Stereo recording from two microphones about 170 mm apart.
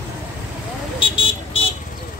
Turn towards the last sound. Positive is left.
turn(degrees=30)  # may be behind; listen again after turning